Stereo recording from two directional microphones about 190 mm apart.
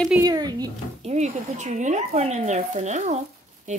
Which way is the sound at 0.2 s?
20° right (ahead or behind).